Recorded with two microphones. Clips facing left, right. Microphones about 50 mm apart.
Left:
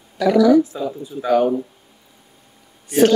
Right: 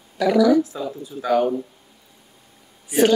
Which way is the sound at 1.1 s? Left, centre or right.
Centre.